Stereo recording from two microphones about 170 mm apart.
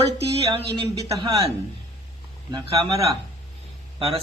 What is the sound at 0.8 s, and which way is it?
Speech, 30° right (ahead or behind).